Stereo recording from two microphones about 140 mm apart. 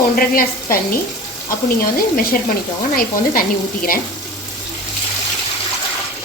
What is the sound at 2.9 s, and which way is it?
A woman's voice, 90° left.